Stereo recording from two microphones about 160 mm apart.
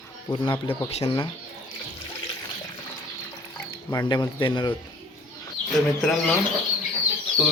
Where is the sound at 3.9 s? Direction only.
25° left (ahead or behind).